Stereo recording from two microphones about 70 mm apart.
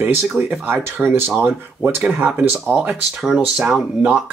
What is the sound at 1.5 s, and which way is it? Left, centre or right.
Speech, centre.